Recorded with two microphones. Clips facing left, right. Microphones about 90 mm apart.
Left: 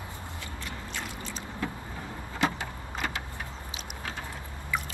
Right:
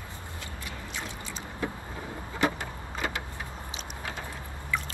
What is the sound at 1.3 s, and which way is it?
Vehicle, 25° right (ahead or behind).